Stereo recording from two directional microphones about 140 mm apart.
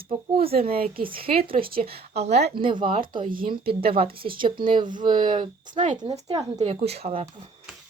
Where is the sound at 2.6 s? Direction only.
35° right (ahead or behind).